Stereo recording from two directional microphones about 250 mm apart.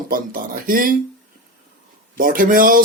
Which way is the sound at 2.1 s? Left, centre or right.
Right.